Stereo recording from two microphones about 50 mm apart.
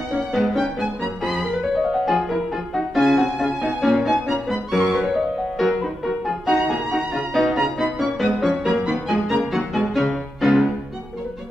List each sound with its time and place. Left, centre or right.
0.3 s music: centre